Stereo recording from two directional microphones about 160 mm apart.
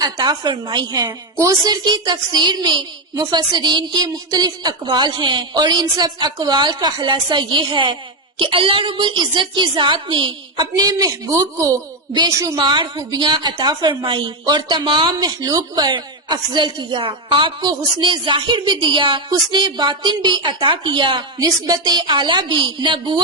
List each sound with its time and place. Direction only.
0.0 s a woman's voice: 25° right (ahead or behind)